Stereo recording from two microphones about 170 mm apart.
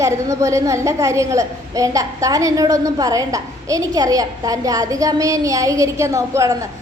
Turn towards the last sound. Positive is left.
turn(degrees=-20)  # may be behind; listen again after turning